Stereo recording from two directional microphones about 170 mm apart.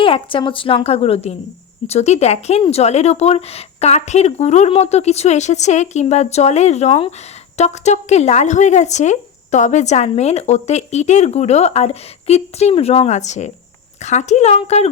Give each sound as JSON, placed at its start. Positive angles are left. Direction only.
{"t": 0.0, "sound": "speech", "side_deg": 30}